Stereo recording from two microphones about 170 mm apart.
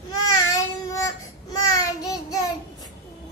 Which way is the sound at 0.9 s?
20° left (ahead or behind).